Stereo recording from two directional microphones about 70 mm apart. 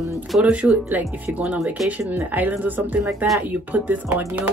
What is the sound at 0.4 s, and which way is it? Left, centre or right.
Speech, centre.